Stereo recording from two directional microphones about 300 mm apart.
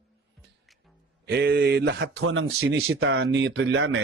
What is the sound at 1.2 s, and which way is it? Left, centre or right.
Speech, right.